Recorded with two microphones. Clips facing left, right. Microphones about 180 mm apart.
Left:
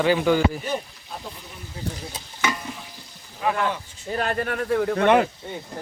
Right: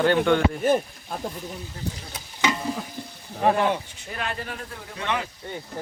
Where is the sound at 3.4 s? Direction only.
40° right (ahead or behind).